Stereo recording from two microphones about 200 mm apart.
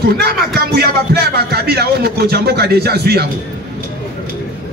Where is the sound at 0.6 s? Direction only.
50° right (ahead or behind).